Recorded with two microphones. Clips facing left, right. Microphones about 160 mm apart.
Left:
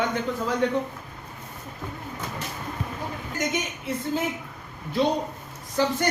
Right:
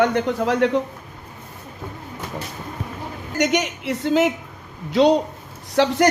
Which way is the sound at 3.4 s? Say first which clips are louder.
Right 9 dB; 85° right.